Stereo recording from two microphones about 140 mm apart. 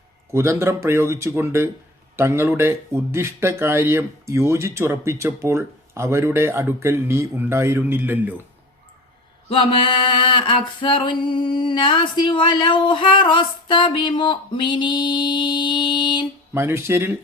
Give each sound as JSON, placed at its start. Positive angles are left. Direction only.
{"t": 0.3, "sound": "speech", "side_deg": -20}
{"t": 9.5, "sound": "a sound", "side_deg": 35}
{"t": 16.6, "sound": "speech", "side_deg": -20}